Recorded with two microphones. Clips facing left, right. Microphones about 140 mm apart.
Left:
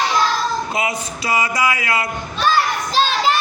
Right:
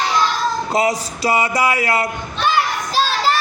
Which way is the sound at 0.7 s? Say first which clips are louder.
Right 5 dB; 35° right (ahead or behind).